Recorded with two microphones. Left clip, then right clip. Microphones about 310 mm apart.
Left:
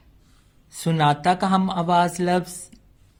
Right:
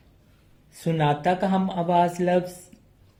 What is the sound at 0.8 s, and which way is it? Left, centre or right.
Speech, left.